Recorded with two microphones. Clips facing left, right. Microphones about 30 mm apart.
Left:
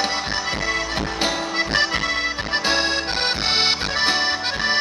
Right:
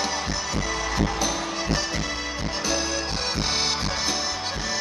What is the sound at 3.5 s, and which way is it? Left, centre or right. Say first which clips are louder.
Accordion: left 5 dB; left.